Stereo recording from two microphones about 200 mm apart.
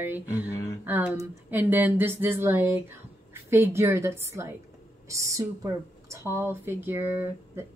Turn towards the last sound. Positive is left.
turn(degrees=-10)  # may be behind; listen again after turning